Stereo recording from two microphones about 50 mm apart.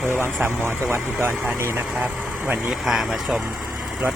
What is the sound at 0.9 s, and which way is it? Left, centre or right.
Speech, right.